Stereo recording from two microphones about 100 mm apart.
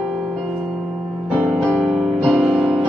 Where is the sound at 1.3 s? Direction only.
15° right (ahead or behind).